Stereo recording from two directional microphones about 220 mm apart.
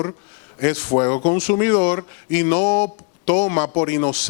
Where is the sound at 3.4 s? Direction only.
20° left (ahead or behind).